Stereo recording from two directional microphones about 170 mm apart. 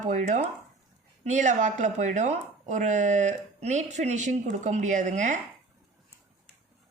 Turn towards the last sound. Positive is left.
turn(degrees=-45)  # may be behind; listen again after turning